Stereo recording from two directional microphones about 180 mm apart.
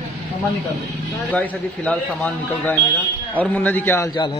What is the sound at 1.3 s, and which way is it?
A man's voice, 10° left (ahead or behind).